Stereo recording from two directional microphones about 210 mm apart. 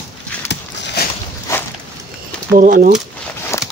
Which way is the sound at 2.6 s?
40° right (ahead or behind).